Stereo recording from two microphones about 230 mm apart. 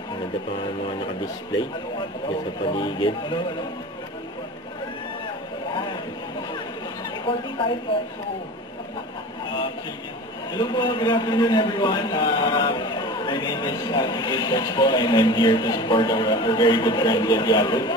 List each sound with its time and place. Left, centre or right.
2.7 s a man's voice: left
7.2 s a man's voice: left
10.5 s a man's voice: centre